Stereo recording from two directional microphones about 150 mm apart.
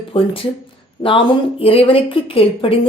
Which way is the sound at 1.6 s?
40° left (ahead or behind).